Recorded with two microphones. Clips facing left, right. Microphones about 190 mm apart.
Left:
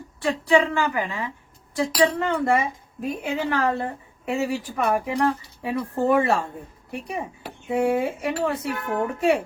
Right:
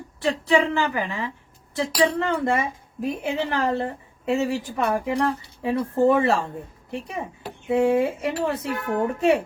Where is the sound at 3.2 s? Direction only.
25° right (ahead or behind).